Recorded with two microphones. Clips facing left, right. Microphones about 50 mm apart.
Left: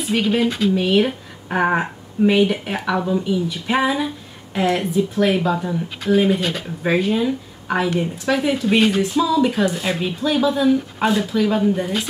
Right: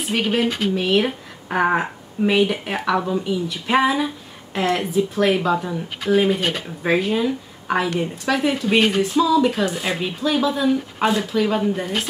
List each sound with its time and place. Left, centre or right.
0.3 s speech: right
0.7 s a woman's voice: centre